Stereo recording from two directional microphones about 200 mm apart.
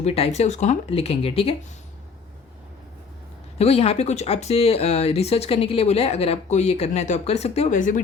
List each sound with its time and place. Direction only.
0.0 s speech: 30° left (ahead or behind)
3.6 s speech: 30° left (ahead or behind)